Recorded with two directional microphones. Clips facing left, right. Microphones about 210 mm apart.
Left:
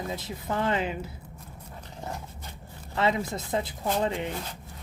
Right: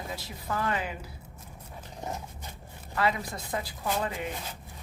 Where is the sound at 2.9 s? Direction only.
25° left (ahead or behind).